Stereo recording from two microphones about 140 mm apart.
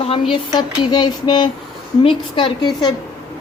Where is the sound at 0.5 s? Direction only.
30° left (ahead or behind).